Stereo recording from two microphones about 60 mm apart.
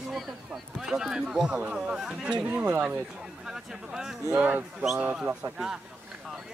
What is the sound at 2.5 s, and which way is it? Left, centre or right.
Speech, right.